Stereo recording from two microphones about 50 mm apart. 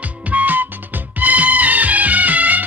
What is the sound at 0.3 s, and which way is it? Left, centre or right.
Music, right.